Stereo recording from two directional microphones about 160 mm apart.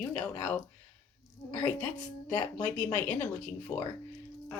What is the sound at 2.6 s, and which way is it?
Speech, 5° left (ahead or behind).